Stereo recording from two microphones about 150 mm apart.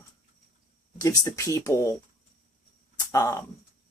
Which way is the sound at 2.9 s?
20° left (ahead or behind).